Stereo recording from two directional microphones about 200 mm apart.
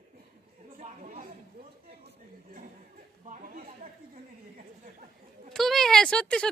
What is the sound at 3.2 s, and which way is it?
Chatter, 40° right (ahead or behind).